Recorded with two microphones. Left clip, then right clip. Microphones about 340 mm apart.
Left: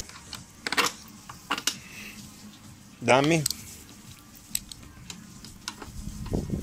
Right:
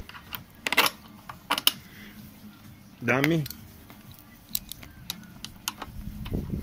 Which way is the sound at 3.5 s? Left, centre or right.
Right.